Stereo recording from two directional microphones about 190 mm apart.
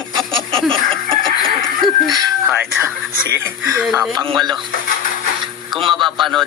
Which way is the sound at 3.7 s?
10° right (ahead or behind).